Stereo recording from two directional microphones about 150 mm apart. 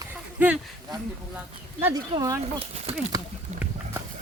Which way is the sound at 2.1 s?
25° right (ahead or behind).